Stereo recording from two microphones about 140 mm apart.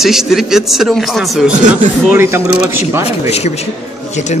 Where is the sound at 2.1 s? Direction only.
15° right (ahead or behind).